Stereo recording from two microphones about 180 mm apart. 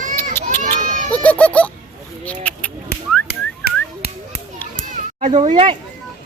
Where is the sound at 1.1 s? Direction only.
5° left (ahead or behind).